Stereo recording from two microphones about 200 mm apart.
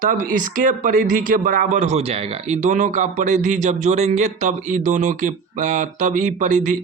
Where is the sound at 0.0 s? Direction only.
45° right (ahead or behind).